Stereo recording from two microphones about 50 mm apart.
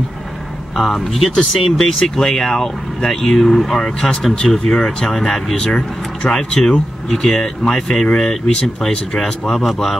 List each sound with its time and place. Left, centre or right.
0.7 s speech: centre